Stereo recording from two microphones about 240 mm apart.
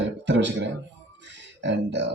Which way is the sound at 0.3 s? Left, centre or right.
Right.